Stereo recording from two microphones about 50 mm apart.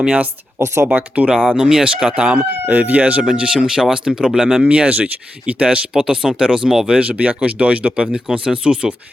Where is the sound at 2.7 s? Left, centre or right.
Right.